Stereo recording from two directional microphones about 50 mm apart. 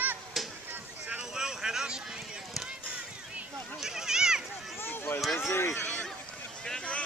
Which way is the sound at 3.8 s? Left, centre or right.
Centre.